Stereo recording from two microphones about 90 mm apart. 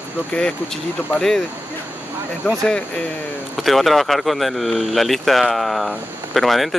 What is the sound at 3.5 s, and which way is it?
Speech, centre (ahead or behind).